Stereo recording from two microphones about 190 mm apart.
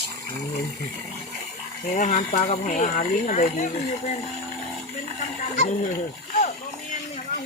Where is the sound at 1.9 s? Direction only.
40° left (ahead or behind).